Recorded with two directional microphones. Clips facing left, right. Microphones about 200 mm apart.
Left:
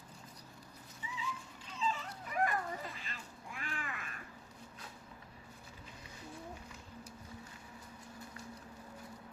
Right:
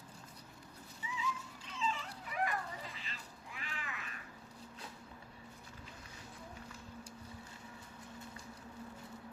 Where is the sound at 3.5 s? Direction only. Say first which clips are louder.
Left 3 dB; 50° left (ahead or behind).